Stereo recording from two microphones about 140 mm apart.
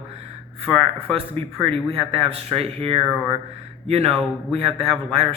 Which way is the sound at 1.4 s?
40° right (ahead or behind).